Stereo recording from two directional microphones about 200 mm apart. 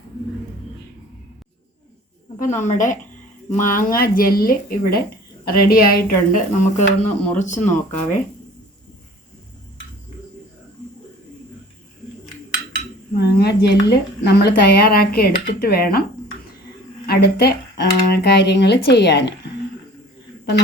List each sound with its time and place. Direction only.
2.4 s speech: 35° left (ahead or behind)
13.1 s speech: 55° left (ahead or behind)
17.1 s speech: 50° left (ahead or behind)